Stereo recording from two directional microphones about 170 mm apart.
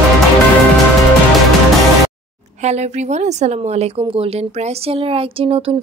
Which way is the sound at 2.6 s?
40° right (ahead or behind).